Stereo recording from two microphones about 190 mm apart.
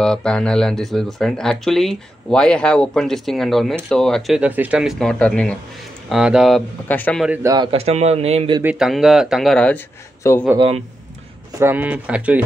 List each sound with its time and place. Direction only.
0.0 s a man's voice: 5° left (ahead or behind)
7.2 s a man's voice: 20° right (ahead or behind)
8.6 s speech: centre (ahead or behind)
11.5 s speech: 10° right (ahead or behind)